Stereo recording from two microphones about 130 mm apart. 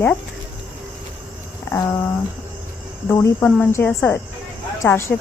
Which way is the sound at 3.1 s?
15° left (ahead or behind).